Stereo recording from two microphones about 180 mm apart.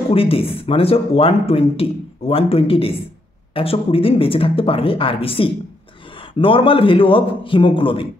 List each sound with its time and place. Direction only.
0.1 s a man's voice: 30° left (ahead or behind)